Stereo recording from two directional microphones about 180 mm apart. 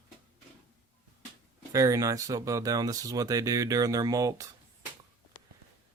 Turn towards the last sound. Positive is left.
turn(degrees=-20)  # may be behind; listen again after turning